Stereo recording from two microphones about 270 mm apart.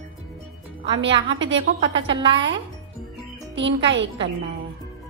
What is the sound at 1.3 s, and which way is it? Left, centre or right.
A woman's voice, right.